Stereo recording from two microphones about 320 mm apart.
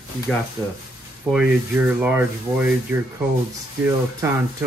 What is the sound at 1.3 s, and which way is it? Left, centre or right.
Speech, centre.